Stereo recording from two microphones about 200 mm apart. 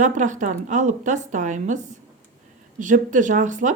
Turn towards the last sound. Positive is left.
turn(degrees=-40)  # may be behind; listen again after turning